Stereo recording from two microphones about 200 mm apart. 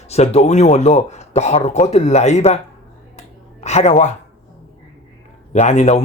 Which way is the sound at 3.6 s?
35° left (ahead or behind).